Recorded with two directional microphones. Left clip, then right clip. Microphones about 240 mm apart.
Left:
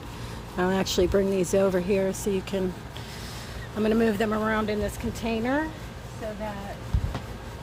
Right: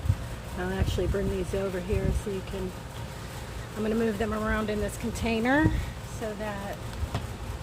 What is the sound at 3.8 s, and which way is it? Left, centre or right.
Speech, left.